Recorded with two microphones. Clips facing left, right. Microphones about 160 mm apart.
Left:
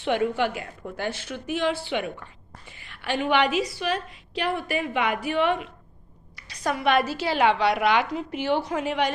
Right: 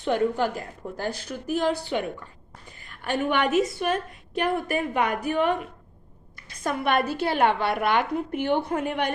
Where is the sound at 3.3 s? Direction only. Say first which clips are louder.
Even; 50° right (ahead or behind).